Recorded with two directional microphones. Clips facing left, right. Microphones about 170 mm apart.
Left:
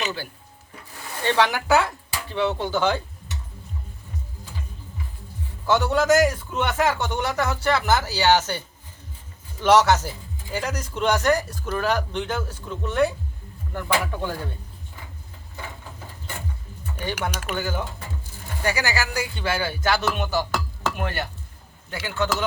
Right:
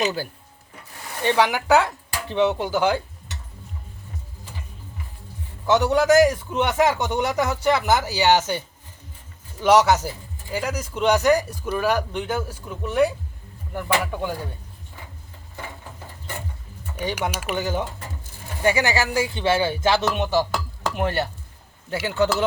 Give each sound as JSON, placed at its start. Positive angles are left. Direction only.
{"t": 0.0, "sound": "speech", "side_deg": -40}
{"t": 1.2, "sound": "a man's voice", "side_deg": -15}
{"t": 5.6, "sound": "a man's voice", "side_deg": -20}
{"t": 17.0, "sound": "a man's voice", "side_deg": -10}